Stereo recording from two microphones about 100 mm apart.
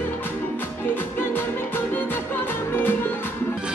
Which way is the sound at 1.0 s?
20° left (ahead or behind).